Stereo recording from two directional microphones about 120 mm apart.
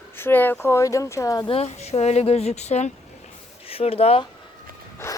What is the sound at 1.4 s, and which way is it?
Speech, 60° left (ahead or behind).